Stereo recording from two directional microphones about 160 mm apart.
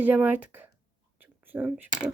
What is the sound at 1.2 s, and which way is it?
Whispering, 10° right (ahead or behind).